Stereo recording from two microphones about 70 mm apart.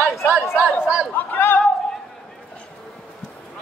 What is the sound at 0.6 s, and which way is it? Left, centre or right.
Chatter, centre.